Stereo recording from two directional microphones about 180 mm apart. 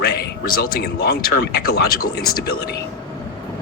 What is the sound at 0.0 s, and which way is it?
Speech, 60° left (ahead or behind).